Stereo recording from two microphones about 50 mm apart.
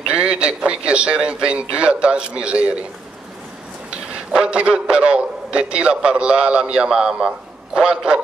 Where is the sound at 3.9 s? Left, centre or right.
Centre.